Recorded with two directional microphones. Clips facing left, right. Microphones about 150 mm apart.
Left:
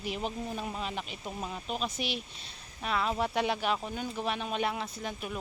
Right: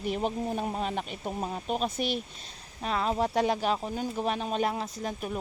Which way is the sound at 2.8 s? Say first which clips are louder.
Right 3 dB; 35° right (ahead or behind).